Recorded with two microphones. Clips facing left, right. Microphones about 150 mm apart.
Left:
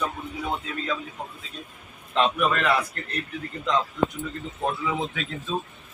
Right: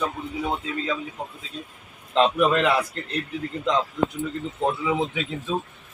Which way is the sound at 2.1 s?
30° right (ahead or behind).